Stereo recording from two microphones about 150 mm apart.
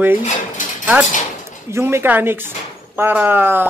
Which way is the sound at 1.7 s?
15° right (ahead or behind).